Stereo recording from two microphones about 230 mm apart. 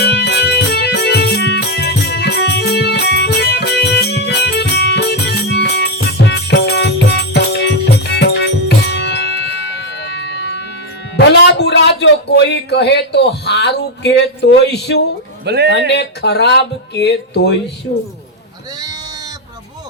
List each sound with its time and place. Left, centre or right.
0.0 s music: left
11.2 s a sound: left
15.4 s a man's voice: right
15.9 s speech: left